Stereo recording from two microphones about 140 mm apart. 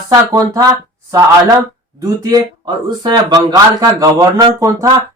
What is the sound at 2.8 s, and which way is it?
Speech, 30° right (ahead or behind).